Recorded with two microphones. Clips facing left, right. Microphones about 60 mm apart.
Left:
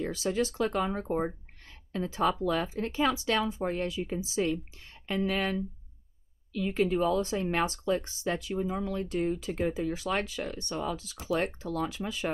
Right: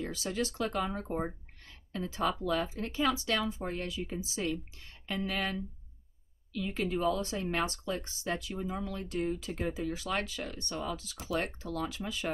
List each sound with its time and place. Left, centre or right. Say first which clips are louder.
0.0 s speech: left 5 dB; left
6.8 s speech: left 4 dB; left